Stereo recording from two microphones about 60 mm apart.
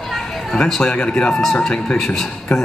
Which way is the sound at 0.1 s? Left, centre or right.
Centre.